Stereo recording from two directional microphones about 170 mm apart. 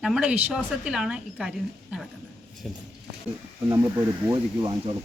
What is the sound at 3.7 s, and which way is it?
Speech, 25° right (ahead or behind).